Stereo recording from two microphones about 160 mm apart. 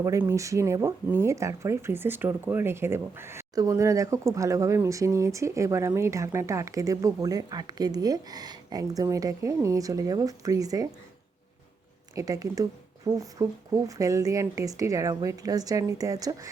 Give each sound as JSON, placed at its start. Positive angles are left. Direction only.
{"t": 0.0, "sound": "speech", "side_deg": -20}
{"t": 12.1, "sound": "speech", "side_deg": -20}